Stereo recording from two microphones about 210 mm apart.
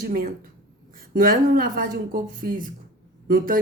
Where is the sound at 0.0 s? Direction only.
45° right (ahead or behind).